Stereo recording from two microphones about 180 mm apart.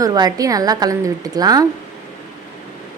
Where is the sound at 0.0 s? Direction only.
20° right (ahead or behind).